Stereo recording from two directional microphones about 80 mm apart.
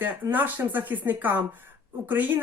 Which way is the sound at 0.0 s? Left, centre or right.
Right.